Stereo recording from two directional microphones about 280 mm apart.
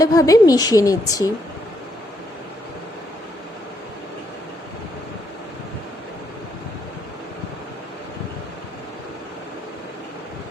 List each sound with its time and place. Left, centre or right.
0.0 s a woman's voice: centre